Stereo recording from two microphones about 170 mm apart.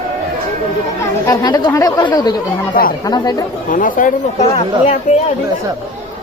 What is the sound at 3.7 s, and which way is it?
Speech, 50° left (ahead or behind).